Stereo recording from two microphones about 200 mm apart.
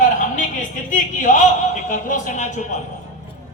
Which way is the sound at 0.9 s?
40° left (ahead or behind).